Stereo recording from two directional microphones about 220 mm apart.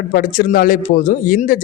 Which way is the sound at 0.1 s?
40° left (ahead or behind).